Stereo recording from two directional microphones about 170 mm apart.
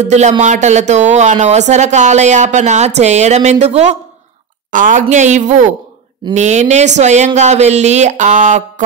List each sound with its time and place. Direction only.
0.0 s speech: 45° right (ahead or behind)
4.6 s speech: 50° right (ahead or behind)